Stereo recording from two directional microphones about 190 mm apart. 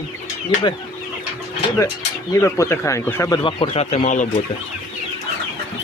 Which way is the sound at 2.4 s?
15° left (ahead or behind).